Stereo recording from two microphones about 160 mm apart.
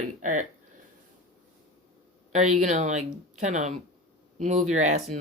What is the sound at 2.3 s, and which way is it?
Speech, 45° right (ahead or behind).